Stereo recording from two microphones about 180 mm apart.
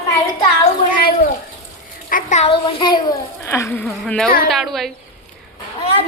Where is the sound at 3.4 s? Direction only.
15° left (ahead or behind).